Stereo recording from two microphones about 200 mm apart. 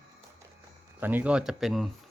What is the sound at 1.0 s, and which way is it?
Speech, 10° right (ahead or behind).